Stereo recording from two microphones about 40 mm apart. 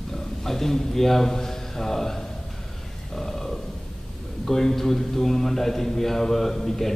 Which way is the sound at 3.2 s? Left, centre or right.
Centre.